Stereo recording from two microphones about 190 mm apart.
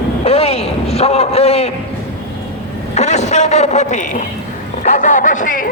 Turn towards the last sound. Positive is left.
turn(degrees=45)  # may be behind; listen again after turning